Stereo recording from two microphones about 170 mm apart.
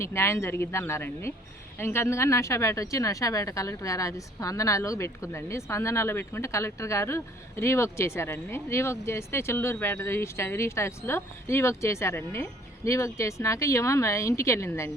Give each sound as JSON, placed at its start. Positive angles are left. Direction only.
{"t": 0.0, "sound": "a woman's voice", "side_deg": 15}